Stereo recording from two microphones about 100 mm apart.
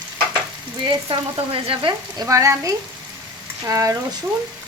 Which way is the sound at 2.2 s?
35° right (ahead or behind).